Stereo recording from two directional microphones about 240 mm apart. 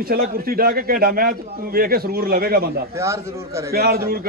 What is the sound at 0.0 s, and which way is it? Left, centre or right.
A man's voice, right.